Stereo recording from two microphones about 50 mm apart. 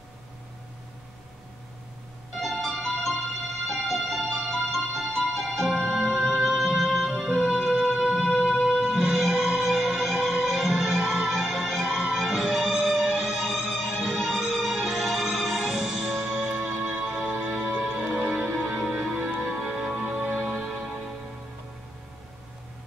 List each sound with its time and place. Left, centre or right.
2.4 s music: centre
20.4 s music: centre